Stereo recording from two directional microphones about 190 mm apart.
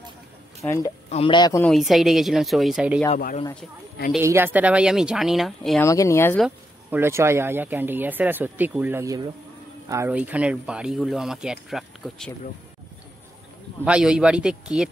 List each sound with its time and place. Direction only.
0.6 s speech: 15° left (ahead or behind)
1.1 s speech: 25° left (ahead or behind)
1.6 s speech: centre (ahead or behind)
4.2 s speech: 10° right (ahead or behind)
5.8 s speech: 15° left (ahead or behind)
6.4 s speech: 10° right (ahead or behind)
13.8 s speech: 5° right (ahead or behind)